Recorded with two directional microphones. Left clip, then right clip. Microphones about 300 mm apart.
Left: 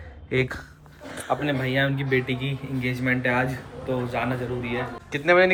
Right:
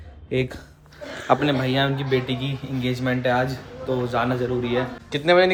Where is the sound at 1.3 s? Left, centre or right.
Centre.